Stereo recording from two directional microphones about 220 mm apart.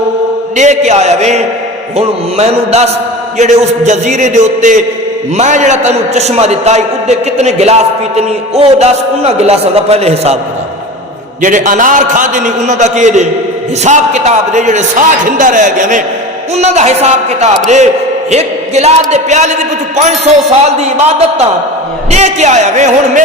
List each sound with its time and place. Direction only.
0.5 s a man's voice: 30° right (ahead or behind)
11.4 s a man's voice: 35° right (ahead or behind)